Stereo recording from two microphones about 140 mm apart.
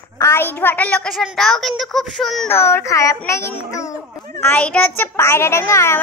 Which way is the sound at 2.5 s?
20° left (ahead or behind).